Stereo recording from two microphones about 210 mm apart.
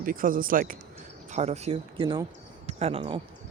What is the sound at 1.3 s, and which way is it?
Speech, 30° right (ahead or behind).